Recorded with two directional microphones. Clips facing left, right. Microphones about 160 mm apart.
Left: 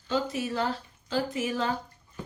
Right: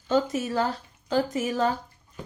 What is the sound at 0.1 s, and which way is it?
A woman's voice, 45° right (ahead or behind).